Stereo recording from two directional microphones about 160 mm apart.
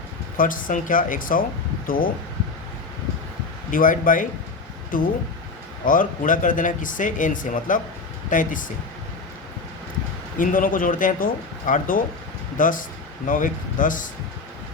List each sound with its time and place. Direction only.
0.3 s speech: 60° left (ahead or behind)
3.7 s speech: 60° left (ahead or behind)
10.3 s speech: 55° left (ahead or behind)